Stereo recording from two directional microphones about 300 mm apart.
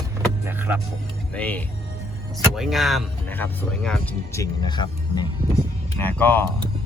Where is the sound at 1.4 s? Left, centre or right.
Centre.